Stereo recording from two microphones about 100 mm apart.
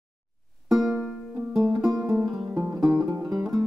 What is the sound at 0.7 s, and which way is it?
Music, 5° right (ahead or behind).